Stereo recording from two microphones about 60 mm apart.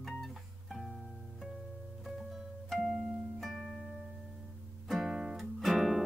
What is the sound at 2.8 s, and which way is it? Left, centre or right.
Music, centre.